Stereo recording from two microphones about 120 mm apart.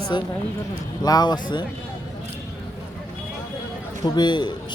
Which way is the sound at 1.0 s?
35° left (ahead or behind).